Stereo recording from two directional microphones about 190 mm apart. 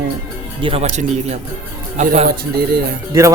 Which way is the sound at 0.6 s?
30° right (ahead or behind).